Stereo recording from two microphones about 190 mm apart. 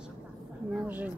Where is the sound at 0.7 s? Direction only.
10° right (ahead or behind).